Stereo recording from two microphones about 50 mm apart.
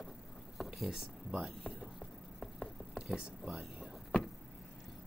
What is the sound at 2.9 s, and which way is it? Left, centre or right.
Speech, centre.